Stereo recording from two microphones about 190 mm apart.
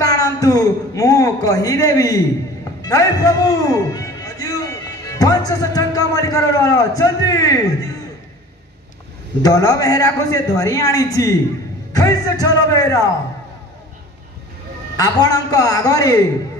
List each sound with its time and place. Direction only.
0.0 s a man's voice: 20° left (ahead or behind)
9.4 s a man's voice: 20° left (ahead or behind)
15.0 s a man's voice: 20° left (ahead or behind)